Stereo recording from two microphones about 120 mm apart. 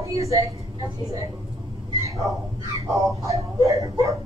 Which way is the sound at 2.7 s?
25° right (ahead or behind).